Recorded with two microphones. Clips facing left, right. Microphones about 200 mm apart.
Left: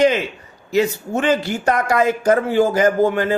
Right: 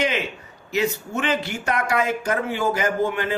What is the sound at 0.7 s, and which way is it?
Speech, 35° left (ahead or behind).